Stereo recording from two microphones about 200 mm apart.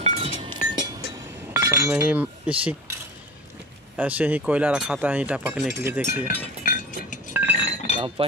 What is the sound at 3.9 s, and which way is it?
Speech, 10° right (ahead or behind).